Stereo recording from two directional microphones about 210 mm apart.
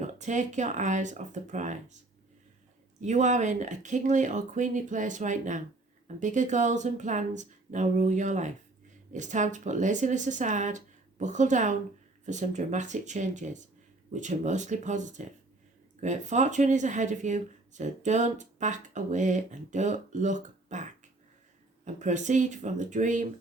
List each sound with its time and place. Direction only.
0.0 s speech: 35° right (ahead or behind)
3.0 s speech: 35° right (ahead or behind)